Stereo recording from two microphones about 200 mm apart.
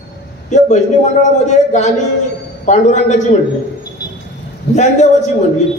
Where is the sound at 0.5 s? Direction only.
35° left (ahead or behind).